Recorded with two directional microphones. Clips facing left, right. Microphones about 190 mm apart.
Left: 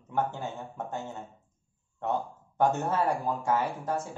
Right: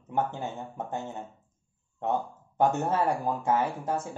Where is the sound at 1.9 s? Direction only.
20° right (ahead or behind).